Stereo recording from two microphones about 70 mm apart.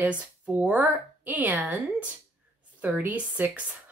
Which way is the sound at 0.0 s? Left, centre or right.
Centre.